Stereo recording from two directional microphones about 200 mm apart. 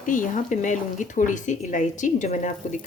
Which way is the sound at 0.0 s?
40° left (ahead or behind).